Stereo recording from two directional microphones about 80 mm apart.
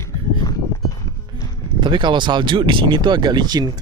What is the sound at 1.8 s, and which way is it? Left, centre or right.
Speech, right.